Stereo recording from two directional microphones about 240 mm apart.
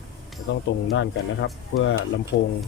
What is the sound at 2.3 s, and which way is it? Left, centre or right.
Speech, left.